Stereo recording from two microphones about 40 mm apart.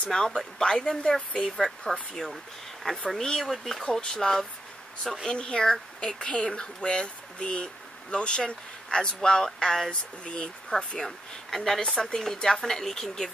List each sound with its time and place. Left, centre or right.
0.1 s speech: centre
3.3 s speech: centre; by 11.0 s left
11.0 s speech: centre